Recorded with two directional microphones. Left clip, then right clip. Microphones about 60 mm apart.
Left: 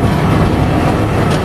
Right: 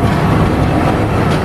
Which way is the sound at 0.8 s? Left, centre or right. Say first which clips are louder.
Even; centre.